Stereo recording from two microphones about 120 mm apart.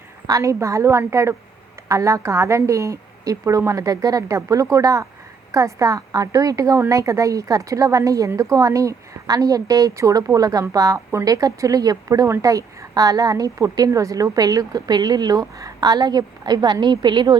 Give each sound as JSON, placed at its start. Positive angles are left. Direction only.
{"t": 0.3, "sound": "a woman's voice", "side_deg": -25}